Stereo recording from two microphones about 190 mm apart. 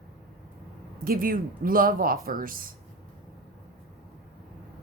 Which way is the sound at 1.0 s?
50° right (ahead or behind).